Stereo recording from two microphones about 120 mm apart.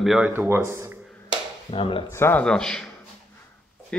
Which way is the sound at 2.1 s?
20° left (ahead or behind).